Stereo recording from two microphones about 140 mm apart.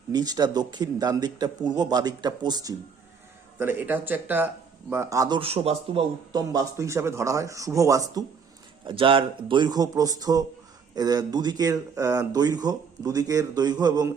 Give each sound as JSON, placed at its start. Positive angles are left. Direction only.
{"t": 0.1, "sound": "a man's voice", "side_deg": -30}
{"t": 3.6, "sound": "speech", "side_deg": -15}
{"t": 5.4, "sound": "a man's voice", "side_deg": -45}
{"t": 6.3, "sound": "a man's voice", "side_deg": -25}
{"t": 8.9, "sound": "a man's voice", "side_deg": -40}